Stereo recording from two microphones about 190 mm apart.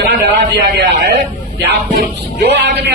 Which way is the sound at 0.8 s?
70° right (ahead or behind).